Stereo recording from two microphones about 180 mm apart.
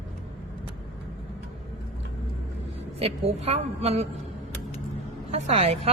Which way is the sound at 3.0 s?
35° right (ahead or behind).